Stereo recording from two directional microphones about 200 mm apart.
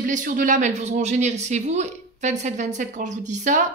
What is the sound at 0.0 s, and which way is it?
Speech, 40° right (ahead or behind).